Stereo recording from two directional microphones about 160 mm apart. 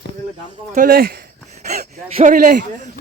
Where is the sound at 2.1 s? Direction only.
50° right (ahead or behind).